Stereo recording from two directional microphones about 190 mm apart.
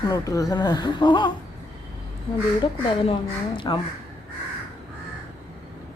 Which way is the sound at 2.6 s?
25° left (ahead or behind).